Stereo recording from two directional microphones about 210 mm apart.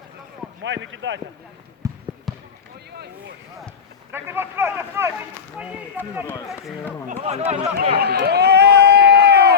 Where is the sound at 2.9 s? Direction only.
50° right (ahead or behind).